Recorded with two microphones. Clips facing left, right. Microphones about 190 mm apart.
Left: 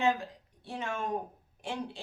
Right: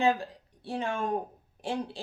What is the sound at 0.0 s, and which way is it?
A woman's voice, 35° right (ahead or behind).